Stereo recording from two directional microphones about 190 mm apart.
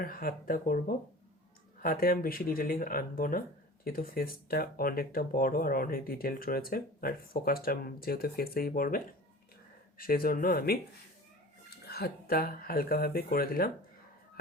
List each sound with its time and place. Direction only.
0.0 s speech: 50° left (ahead or behind)
10.0 s speech: 50° left (ahead or behind)
11.9 s speech: 55° left (ahead or behind)